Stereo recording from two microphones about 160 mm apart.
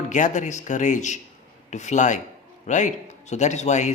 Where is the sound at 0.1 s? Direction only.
50° left (ahead or behind).